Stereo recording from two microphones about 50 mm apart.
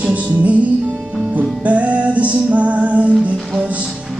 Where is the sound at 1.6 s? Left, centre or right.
Right.